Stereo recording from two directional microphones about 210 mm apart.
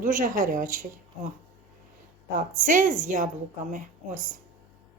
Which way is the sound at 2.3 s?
40° right (ahead or behind).